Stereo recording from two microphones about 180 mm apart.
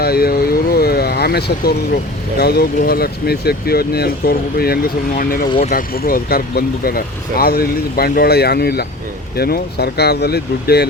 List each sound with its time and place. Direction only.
0.0 s vehicle: 60° left (ahead or behind)
2.4 s speech: 60° left (ahead or behind)
5.5 s speech: 30° left (ahead or behind)
5.7 s speech: 55° left (ahead or behind)